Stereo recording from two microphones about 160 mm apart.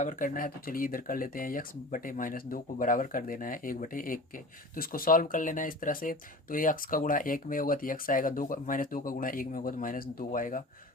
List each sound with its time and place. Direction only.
0.0 s speech: 55° left (ahead or behind)